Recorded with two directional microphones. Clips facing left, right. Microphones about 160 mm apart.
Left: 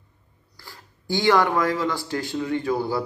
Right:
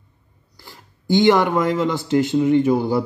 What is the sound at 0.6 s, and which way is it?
A man's voice, 20° right (ahead or behind).